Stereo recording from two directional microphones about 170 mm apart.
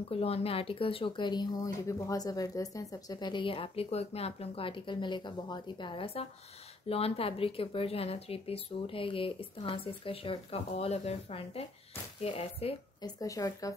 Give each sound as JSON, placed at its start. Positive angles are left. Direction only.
{"t": 0.1, "sound": "a woman's voice", "side_deg": 35}
{"t": 13.0, "sound": "speech", "side_deg": 20}